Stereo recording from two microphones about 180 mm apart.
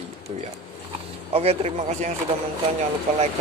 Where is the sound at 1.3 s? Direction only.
35° right (ahead or behind).